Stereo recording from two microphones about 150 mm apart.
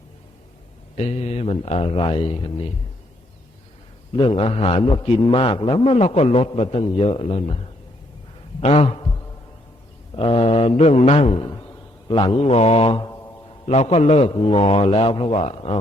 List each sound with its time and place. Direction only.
0.9 s a man's voice: 45° left (ahead or behind)
4.1 s a man's voice: 35° left (ahead or behind)
8.6 s a man's voice: 40° left (ahead or behind)
10.2 s mantra: 40° left (ahead or behind)
12.0 s a man's voice: 35° left (ahead or behind)